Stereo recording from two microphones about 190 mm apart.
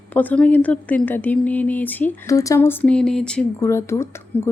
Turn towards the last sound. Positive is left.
turn(degrees=15)  # may be behind; listen again after turning